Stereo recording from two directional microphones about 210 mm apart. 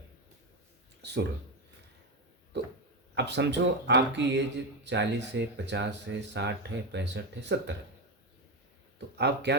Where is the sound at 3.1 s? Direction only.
55° right (ahead or behind).